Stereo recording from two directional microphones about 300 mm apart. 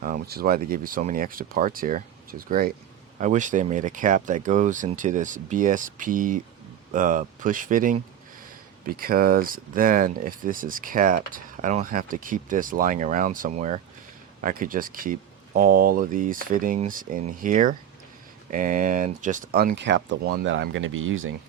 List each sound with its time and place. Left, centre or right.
0.0 s speech: right